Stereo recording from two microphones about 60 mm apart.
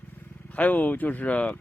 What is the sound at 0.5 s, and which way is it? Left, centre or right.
Speech, left.